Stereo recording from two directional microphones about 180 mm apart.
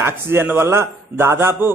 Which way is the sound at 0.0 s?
15° right (ahead or behind).